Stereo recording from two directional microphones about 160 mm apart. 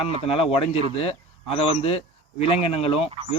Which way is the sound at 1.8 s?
40° left (ahead or behind).